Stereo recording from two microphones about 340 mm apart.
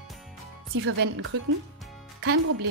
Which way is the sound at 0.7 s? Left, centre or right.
Right.